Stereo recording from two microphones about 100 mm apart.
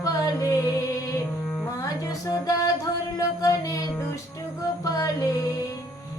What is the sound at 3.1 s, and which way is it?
Music, 35° left (ahead or behind).